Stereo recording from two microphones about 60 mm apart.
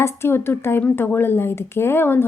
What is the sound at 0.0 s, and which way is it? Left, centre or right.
A woman's voice, left.